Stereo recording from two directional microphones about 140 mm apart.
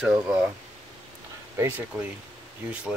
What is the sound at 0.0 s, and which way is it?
Speech, 10° right (ahead or behind).